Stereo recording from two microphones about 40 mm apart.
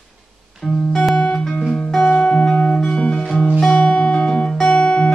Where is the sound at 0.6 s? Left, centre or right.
Left.